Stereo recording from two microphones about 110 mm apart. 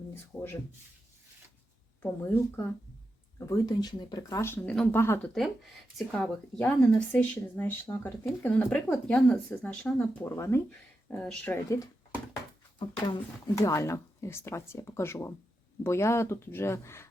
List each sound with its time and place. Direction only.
0.1 s speech: 20° left (ahead or behind)
2.0 s speech: 20° left (ahead or behind)
3.4 s speech: 30° left (ahead or behind)
4.6 s speech: 5° left (ahead or behind)
4.9 s speech: 20° left (ahead or behind)
5.2 s speech: 5° left (ahead or behind)
10.2 s speech: 25° left (ahead or behind)
11.1 s speech: 10° left (ahead or behind)
12.8 s speech: 50° left (ahead or behind)
13.6 s speech: 25° left (ahead or behind)